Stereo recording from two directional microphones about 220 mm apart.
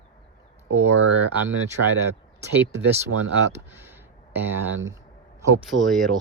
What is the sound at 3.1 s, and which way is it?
Speech, 90° right.